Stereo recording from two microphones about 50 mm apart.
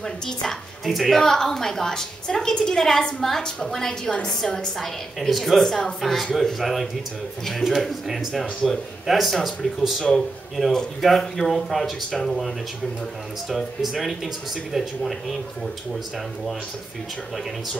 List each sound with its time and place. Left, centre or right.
0.0 s a woman's voice: centre
10.6 s speech: centre
11.0 s speech: centre